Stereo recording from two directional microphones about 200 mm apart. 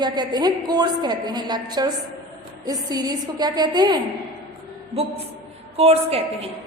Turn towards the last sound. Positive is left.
turn(degrees=-30)  # may be behind; listen again after turning